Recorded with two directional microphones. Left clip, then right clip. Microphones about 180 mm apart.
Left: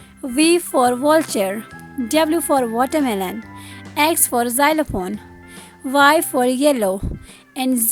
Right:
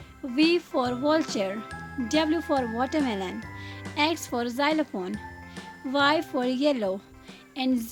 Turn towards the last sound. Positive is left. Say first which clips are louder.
# left 7 dB
turn(degrees=50)  # may be behind; listen again after turning